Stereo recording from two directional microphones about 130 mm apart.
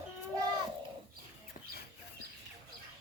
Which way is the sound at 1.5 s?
90° left.